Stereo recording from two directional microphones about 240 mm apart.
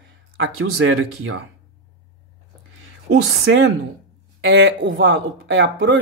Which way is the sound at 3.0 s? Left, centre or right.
Right.